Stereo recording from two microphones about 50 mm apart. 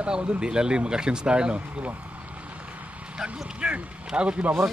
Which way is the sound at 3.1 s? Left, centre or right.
Right.